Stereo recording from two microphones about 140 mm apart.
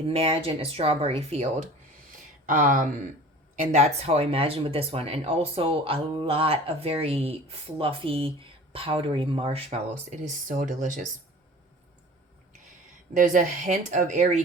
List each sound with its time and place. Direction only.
0.1 s speech: 45° right (ahead or behind)
2.1 s a sound: 75° right (ahead or behind)
3.6 s speech: 55° right (ahead or behind)
13.1 s speech: 65° right (ahead or behind)